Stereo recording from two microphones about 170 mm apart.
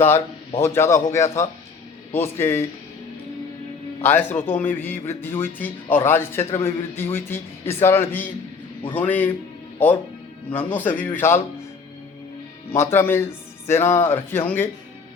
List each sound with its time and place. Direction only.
0.6 s speech: 15° left (ahead or behind)
4.0 s speech: 10° left (ahead or behind)
12.7 s speech: 15° left (ahead or behind)